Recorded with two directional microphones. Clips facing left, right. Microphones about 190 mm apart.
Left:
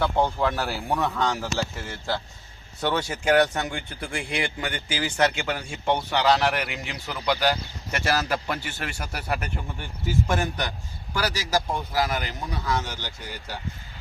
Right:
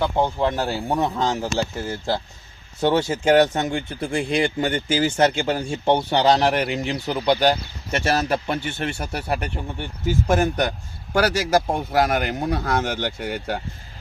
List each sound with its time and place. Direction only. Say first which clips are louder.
0.0 s speech: right 2 dB; 15° right (ahead or behind); by 9.5 s 30° right (ahead or behind)
10.2 s speech: right 7 dB; 45° right (ahead or behind)
11.1 s speech: right 7 dB; 55° right (ahead or behind)